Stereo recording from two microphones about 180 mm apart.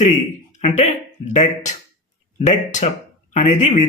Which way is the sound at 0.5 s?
35° left (ahead or behind).